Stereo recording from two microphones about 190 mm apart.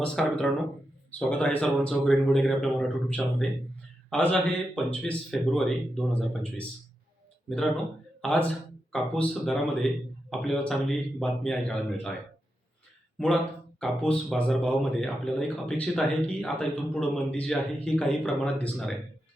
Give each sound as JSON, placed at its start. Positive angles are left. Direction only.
{"t": 0.0, "sound": "speech", "side_deg": 5}
{"t": 13.1, "sound": "speech", "side_deg": 5}